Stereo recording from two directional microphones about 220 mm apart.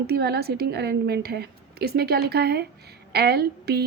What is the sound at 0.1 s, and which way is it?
Speech, 45° right (ahead or behind).